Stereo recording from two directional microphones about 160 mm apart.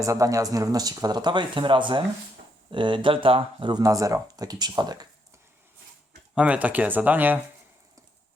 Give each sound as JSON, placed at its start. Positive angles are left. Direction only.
{"t": 0.0, "sound": "speech", "side_deg": -20}
{"t": 6.3, "sound": "speech", "side_deg": -10}